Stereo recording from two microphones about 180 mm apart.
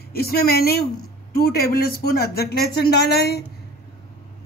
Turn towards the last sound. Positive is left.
turn(degrees=60)  # may be behind; listen again after turning